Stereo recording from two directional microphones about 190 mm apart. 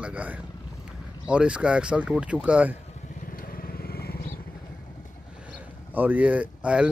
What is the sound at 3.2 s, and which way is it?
Vehicle, 50° left (ahead or behind).